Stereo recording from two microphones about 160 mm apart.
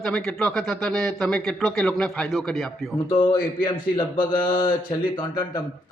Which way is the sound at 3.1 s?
30° left (ahead or behind).